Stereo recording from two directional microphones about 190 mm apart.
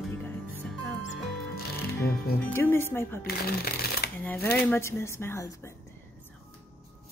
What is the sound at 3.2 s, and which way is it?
Speech, 55° left (ahead or behind).